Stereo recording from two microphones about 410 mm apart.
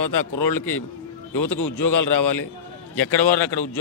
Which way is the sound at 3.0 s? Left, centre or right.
Centre.